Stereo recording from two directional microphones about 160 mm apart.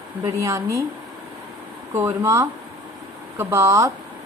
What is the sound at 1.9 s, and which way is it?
Speech, 15° right (ahead or behind).